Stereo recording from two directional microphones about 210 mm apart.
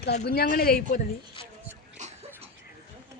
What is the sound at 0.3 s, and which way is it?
Speech, 45° left (ahead or behind).